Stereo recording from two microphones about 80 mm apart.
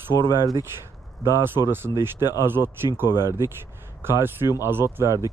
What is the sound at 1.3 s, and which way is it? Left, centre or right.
Speech, right.